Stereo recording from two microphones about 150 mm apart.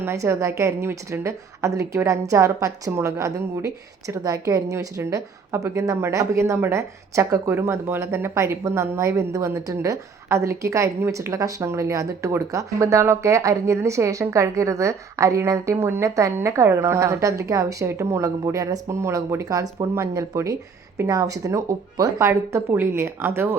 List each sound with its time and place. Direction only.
0.0 s a woman's voice: 15° right (ahead or behind)